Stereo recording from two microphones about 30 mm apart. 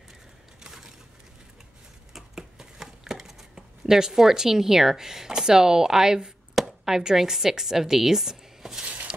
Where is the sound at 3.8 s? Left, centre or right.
Centre.